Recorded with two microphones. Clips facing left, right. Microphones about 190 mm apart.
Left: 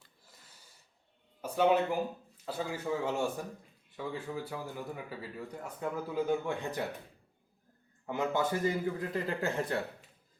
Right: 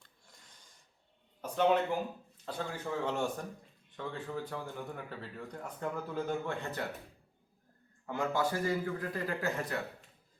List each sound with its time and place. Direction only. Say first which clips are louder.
0.0 s snort: left 1 dB; 5° left (ahead or behind)
1.4 s speech: left 1 dB; 5° left (ahead or behind)
8.0 s a man's voice: left 1 dB; 20° left (ahead or behind)